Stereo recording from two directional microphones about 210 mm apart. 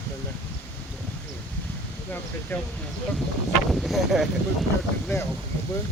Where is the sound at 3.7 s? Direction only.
Centre (ahead or behind).